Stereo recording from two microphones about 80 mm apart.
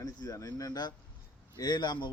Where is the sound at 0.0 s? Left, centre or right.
Left.